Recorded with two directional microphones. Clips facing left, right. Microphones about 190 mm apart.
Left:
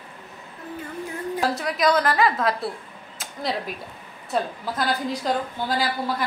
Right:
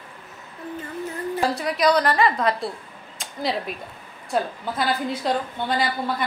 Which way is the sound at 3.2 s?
5° left (ahead or behind).